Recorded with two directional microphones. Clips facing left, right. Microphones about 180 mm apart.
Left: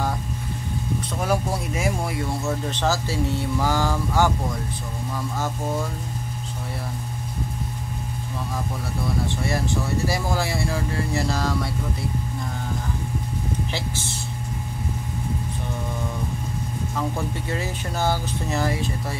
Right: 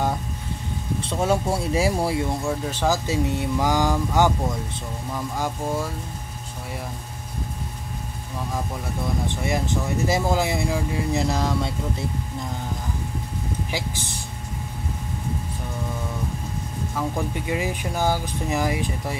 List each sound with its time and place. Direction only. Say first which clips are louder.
1.1 s speech: right 3 dB; 25° right (ahead or behind)
2.2 s speech: right 1 dB; 15° right (ahead or behind)
9.3 s speech: even; 20° right (ahead or behind)
13.7 s speech: even; 15° right (ahead or behind)
17.5 s speech: right 2 dB; 15° right (ahead or behind)